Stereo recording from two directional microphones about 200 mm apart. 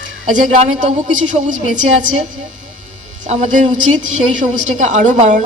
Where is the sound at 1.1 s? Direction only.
40° right (ahead or behind).